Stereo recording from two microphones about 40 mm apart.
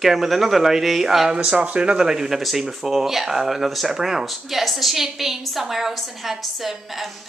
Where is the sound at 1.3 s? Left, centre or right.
Right.